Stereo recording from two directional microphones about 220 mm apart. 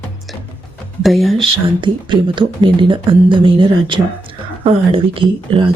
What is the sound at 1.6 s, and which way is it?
Speech, 20° right (ahead or behind).